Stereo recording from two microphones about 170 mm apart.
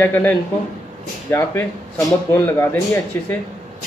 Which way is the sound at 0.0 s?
10° left (ahead or behind).